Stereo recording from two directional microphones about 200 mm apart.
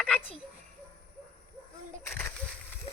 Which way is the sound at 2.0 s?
10° left (ahead or behind).